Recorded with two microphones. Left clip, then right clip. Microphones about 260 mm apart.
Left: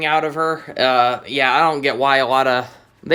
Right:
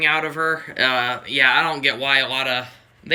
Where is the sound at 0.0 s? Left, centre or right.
Centre.